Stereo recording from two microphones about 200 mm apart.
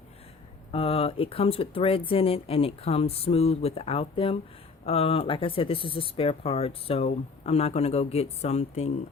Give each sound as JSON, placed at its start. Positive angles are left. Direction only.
{"t": 0.7, "sound": "speech", "side_deg": 30}